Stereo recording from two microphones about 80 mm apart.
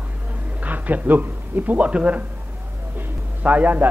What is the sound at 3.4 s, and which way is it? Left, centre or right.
Speech, centre.